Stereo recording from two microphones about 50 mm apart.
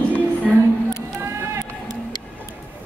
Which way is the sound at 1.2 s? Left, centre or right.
Right.